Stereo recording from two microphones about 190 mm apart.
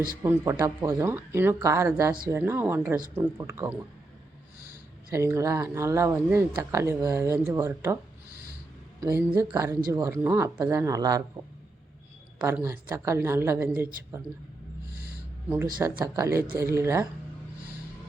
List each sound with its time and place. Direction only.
0.2 s speech: 10° right (ahead or behind)
5.1 s speech: 15° right (ahead or behind)
9.0 s speech: 15° right (ahead or behind)
12.4 s speech: 10° right (ahead or behind)
15.4 s speech: 15° right (ahead or behind)